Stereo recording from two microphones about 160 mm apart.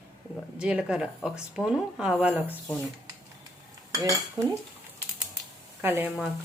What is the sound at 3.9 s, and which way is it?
Cutlery, 20° right (ahead or behind).